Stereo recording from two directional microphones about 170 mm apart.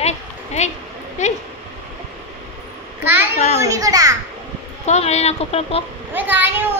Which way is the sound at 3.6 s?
20° right (ahead or behind).